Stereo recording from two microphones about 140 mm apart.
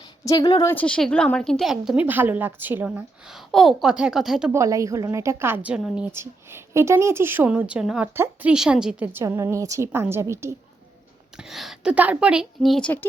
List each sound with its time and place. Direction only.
0.3 s speech: 25° left (ahead or behind)
0.7 s a woman's voice: 10° left (ahead or behind)
4.5 s a woman's voice: 20° right (ahead or behind); by 6.1 s 5° right (ahead or behind)
6.1 s a woman's voice: 15° right (ahead or behind)
9.2 s a woman's voice: 20° right (ahead or behind)
11.3 s a woman's voice: centre (ahead or behind)